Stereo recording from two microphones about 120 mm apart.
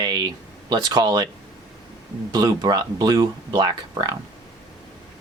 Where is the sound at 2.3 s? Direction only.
30° right (ahead or behind).